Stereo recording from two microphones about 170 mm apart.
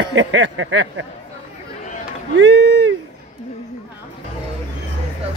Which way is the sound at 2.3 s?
90° right.